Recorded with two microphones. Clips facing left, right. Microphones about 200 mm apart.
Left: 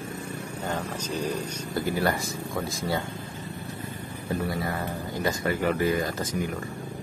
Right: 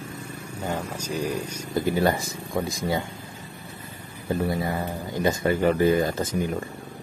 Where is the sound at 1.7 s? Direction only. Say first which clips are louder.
Right 4 dB; 20° right (ahead or behind).